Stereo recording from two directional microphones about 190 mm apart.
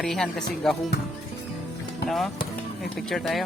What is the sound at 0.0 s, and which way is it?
Music, centre (ahead or behind).